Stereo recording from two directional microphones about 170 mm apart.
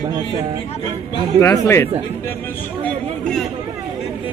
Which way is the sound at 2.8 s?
5° left (ahead or behind).